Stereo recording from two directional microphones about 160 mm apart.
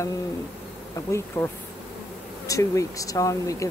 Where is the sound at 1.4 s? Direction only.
15° left (ahead or behind).